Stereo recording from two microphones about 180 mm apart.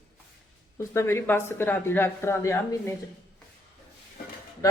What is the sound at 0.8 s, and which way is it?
A woman's voice, 15° left (ahead or behind).